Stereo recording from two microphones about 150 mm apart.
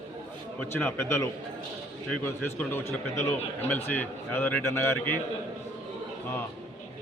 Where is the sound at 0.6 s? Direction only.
15° left (ahead or behind).